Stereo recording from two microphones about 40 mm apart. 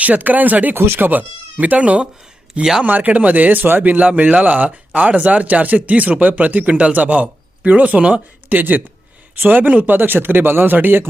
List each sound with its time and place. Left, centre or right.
0.0 s speech: right
0.8 s speech: right
3.9 s speech: right
10.8 s speech: right